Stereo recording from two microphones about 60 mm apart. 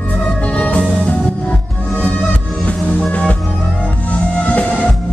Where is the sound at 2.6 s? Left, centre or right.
Left.